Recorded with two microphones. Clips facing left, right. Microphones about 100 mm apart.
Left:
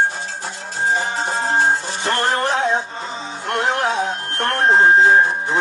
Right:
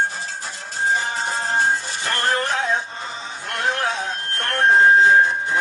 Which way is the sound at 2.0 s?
20° left (ahead or behind).